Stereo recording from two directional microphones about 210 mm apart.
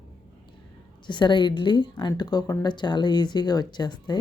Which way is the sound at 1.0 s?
20° left (ahead or behind).